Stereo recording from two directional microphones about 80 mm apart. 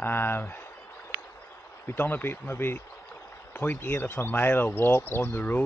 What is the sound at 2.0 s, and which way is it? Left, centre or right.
Speech, left.